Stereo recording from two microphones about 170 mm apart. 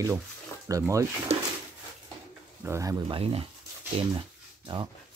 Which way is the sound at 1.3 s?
35° right (ahead or behind).